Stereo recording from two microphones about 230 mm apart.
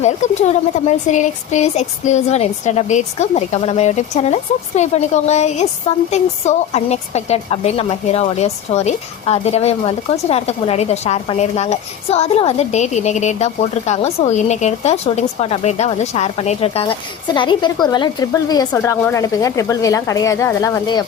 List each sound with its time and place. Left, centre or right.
0.0 s speech: left